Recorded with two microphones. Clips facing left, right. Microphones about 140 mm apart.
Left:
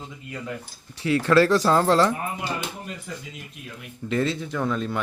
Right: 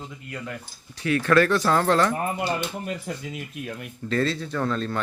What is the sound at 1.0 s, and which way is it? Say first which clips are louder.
Speech: left 1 dB; 25° left (ahead or behind).